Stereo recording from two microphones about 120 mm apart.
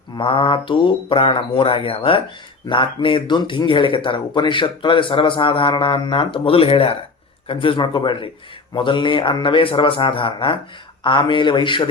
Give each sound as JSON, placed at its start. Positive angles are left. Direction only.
{"t": 0.2, "sound": "speech", "side_deg": 45}